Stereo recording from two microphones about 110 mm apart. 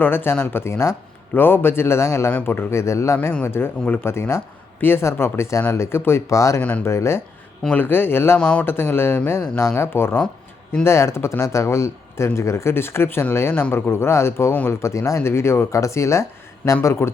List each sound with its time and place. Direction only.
0.0 s speech: 20° left (ahead or behind)
6.6 s speech: 15° left (ahead or behind)
6.8 s speech: 25° left (ahead or behind)
7.6 s speech: 15° left (ahead or behind)
8.4 s speech: 10° left (ahead or behind)